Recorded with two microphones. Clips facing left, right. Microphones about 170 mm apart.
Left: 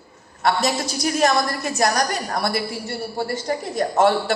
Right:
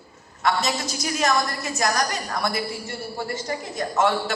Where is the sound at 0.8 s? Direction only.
40° left (ahead or behind).